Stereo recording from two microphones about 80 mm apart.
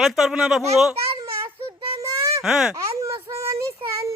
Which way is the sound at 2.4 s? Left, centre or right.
Centre.